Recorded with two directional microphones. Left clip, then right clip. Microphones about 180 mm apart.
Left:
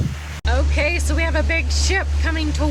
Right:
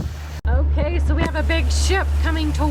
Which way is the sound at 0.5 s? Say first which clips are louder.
Left 5 dB; 5° right (ahead or behind).